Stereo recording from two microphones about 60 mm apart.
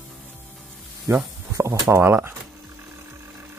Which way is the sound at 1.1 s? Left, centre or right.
Right.